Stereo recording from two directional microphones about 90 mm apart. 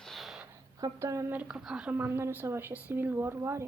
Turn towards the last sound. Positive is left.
turn(degrees=-30)  # may be behind; listen again after turning